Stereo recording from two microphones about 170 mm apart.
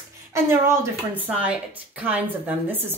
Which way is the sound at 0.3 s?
15° right (ahead or behind).